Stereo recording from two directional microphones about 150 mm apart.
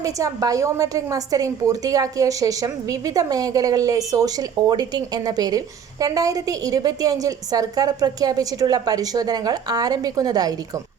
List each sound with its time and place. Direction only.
0.0 s a woman's voice: 25° right (ahead or behind)